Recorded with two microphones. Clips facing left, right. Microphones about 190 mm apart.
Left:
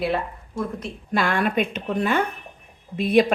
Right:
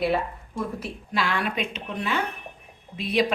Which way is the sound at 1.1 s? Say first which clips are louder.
Left 5 dB; 50° left (ahead or behind).